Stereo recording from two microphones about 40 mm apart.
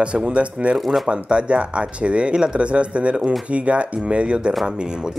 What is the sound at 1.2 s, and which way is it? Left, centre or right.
Speech, right.